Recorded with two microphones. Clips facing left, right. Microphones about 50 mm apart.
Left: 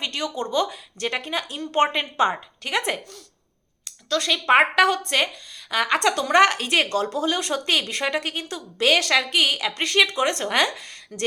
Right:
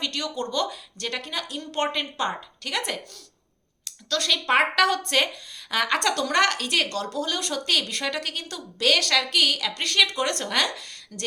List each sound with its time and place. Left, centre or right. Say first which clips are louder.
0.0 s speech: left 2 dB; centre
3.8 s speech: left 2 dB; centre
4.9 s a woman's voice: left 1 dB; centre